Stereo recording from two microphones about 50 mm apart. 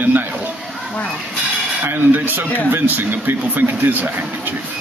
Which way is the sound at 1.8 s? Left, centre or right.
Right.